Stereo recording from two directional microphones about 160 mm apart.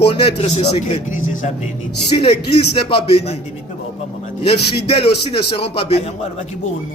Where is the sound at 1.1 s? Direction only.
50° left (ahead or behind).